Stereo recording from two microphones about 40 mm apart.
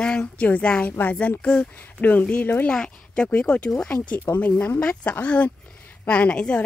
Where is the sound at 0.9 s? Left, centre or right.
Left.